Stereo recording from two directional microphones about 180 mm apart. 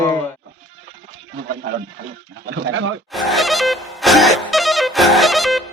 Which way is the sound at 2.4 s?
90° right.